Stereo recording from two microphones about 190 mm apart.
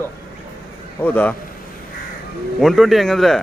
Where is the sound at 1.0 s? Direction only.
10° left (ahead or behind).